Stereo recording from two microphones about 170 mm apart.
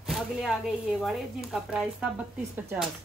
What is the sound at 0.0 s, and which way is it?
Speech, centre (ahead or behind).